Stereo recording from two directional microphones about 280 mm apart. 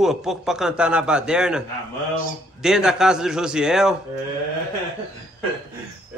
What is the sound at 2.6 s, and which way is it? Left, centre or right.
A man's voice, centre.